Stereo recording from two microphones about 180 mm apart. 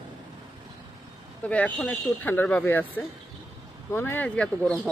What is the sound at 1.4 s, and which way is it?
Speech, 5° left (ahead or behind).